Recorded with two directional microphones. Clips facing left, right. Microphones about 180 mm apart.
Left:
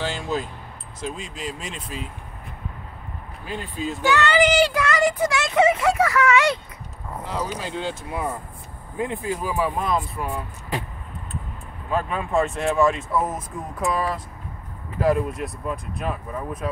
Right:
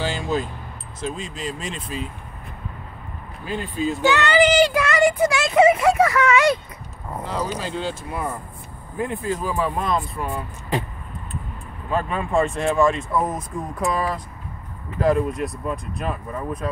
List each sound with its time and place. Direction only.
0.0 s speech: centre (ahead or behind)
3.4 s speech: centre (ahead or behind)
4.0 s speech: 25° right (ahead or behind)
7.4 s speech: 15° left (ahead or behind)
11.9 s speech: 5° left (ahead or behind)